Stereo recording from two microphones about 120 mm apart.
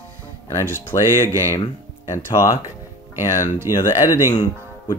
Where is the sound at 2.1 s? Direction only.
25° left (ahead or behind).